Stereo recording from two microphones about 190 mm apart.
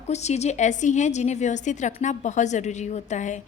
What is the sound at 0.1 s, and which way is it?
A woman's voice, 35° left (ahead or behind).